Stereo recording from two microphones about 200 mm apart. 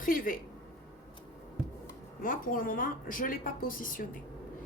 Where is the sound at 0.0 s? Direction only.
45° left (ahead or behind).